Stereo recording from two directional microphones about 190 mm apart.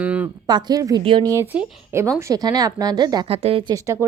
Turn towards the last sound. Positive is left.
turn(degrees=-20)  # may be behind; listen again after turning